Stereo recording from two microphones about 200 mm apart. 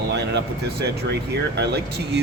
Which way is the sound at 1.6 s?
55° right (ahead or behind).